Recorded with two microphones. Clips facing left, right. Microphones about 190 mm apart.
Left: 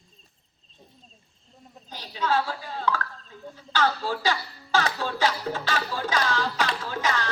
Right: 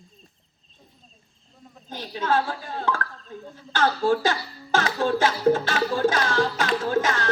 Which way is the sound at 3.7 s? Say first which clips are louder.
Right 5 dB; 50° right (ahead or behind).